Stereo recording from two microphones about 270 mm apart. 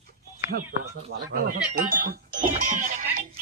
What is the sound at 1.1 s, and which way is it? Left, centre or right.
Speech, right.